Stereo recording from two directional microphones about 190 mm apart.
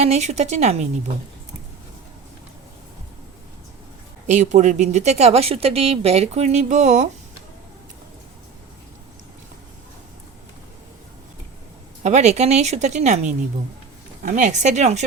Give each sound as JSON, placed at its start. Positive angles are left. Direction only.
{"t": 0.0, "sound": "speech", "side_deg": -35}
{"t": 4.3, "sound": "speech", "side_deg": -40}
{"t": 12.0, "sound": "speech", "side_deg": -35}